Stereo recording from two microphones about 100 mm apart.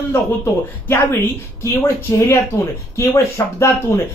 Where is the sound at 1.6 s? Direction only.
25° left (ahead or behind).